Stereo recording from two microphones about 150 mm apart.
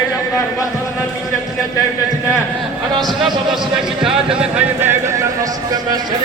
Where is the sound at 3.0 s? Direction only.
Centre (ahead or behind); by 5.5 s 20° right (ahead or behind).